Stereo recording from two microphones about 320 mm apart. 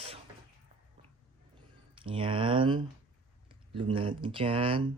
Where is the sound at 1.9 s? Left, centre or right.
Centre.